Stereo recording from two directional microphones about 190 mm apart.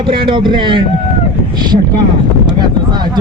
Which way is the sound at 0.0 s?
25° right (ahead or behind).